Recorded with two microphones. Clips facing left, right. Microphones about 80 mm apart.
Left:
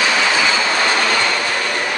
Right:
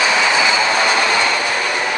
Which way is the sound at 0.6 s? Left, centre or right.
Centre.